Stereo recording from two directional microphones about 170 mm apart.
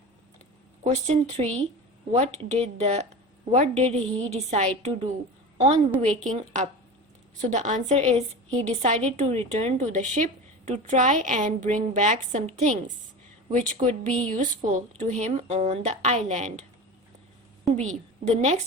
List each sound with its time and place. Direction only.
0.9 s a woman's voice: 40° right (ahead or behind)
13.5 s speech: 50° right (ahead or behind)
17.8 s a woman's voice: 40° right (ahead or behind)